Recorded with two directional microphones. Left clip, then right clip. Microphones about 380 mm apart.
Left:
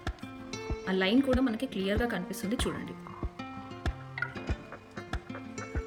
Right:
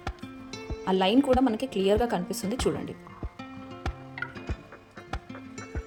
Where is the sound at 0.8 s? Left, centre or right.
Centre.